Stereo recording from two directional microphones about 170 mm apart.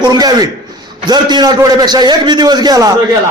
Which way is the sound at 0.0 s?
25° right (ahead or behind).